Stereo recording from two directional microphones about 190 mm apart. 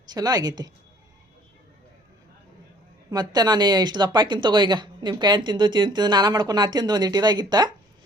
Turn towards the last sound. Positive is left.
turn(degrees=-20)  # may be behind; listen again after turning